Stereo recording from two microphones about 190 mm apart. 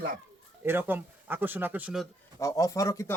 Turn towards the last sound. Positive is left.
turn(degrees=15)  # may be behind; listen again after turning